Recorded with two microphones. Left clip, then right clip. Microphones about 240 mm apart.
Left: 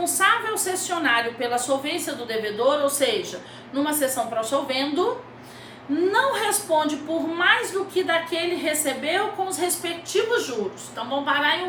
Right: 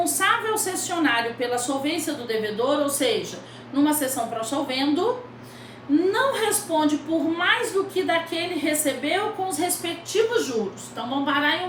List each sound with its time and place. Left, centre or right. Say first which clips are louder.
0.0 s a woman's voice: left 1 dB; centre
6.1 s a woman's voice: left 4 dB; centre